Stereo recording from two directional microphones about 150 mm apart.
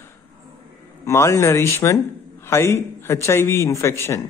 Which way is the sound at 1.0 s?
20° left (ahead or behind).